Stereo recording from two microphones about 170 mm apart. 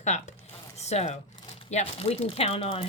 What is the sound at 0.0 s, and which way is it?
Speech, 40° left (ahead or behind).